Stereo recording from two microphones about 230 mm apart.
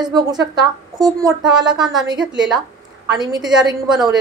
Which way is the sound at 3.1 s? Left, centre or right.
Centre.